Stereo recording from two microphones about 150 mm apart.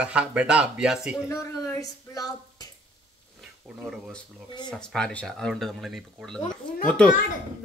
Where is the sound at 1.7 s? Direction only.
25° left (ahead or behind).